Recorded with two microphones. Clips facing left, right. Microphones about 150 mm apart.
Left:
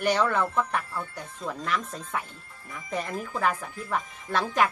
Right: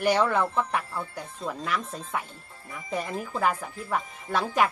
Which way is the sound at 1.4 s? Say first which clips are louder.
Right 1 dB; 25° right (ahead or behind).